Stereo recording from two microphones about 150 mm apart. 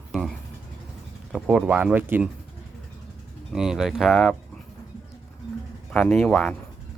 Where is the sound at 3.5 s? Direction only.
5° right (ahead or behind).